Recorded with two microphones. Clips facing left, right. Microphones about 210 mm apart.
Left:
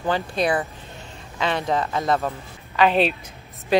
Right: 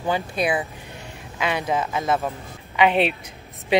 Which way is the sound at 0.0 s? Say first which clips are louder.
Left 1 dB; 10° right (ahead or behind).